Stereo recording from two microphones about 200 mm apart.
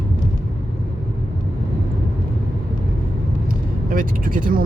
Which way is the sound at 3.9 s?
45° right (ahead or behind).